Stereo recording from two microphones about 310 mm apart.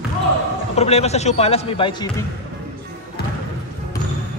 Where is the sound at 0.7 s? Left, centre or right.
Centre.